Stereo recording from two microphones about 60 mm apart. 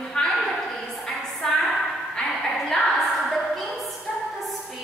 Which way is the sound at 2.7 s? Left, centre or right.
Centre.